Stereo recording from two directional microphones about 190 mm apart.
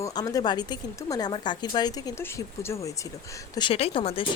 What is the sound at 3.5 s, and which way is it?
Speech, 25° left (ahead or behind).